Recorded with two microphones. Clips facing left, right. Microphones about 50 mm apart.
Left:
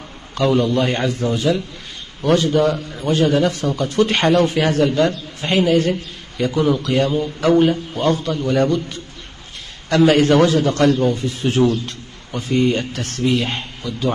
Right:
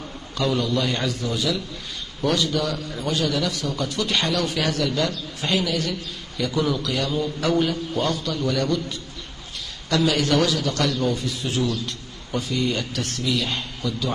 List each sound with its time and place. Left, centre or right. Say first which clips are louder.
0.4 s a man's voice: left 6 dB; left